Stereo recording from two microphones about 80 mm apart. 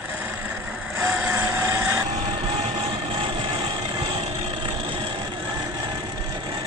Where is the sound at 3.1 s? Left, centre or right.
Right.